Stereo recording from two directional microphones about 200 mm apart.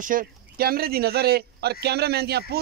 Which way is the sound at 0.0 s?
45° right (ahead or behind).